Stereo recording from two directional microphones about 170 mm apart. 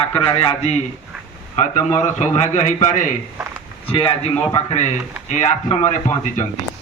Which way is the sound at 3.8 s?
35° left (ahead or behind).